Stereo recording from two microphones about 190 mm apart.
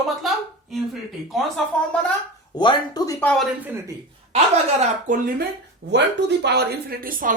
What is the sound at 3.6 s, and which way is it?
Speech, 10° right (ahead or behind).